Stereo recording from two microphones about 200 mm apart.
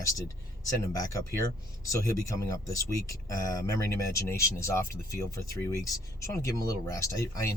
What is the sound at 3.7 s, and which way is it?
Speech, 15° left (ahead or behind).